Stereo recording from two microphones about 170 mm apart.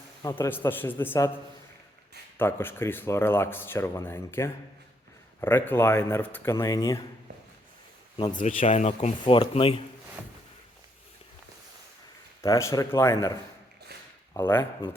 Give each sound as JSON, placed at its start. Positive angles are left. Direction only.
{"t": 0.2, "sound": "speech", "side_deg": 20}
{"t": 2.4, "sound": "speech", "side_deg": 15}
{"t": 8.4, "sound": "speech", "side_deg": 45}
{"t": 9.2, "sound": "speech", "side_deg": 30}
{"t": 10.2, "sound": "a sound", "side_deg": -10}
{"t": 12.4, "sound": "speech", "side_deg": 15}
{"t": 14.3, "sound": "speech", "side_deg": 15}